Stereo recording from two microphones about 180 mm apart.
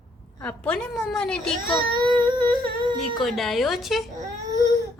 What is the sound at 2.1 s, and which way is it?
Humming, 25° right (ahead or behind).